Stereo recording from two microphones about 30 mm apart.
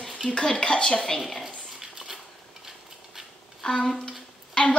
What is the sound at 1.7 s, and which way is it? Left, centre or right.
Dog, centre.